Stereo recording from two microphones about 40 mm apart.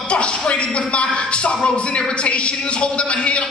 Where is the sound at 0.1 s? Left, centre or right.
Left.